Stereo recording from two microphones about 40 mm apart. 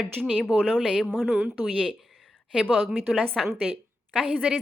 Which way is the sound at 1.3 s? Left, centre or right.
Right.